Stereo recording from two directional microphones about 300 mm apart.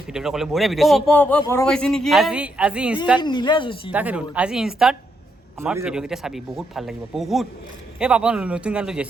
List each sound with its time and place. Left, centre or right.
0.1 s a man's voice: centre
3.2 s speech: centre
3.9 s a man's voice: centre